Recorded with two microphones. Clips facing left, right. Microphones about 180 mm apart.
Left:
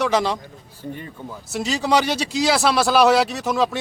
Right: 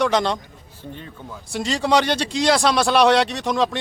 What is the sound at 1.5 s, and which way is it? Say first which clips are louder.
A man's voice: right 1 dB; 5° left (ahead or behind).